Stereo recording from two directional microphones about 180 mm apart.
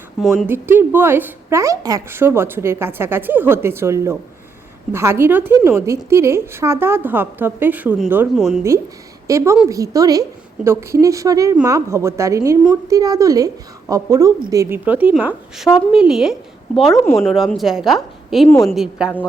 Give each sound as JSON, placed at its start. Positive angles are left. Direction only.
{"t": 0.4, "sound": "a woman's voice", "side_deg": -10}